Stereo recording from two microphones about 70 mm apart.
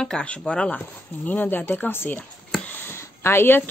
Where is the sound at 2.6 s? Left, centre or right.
Left.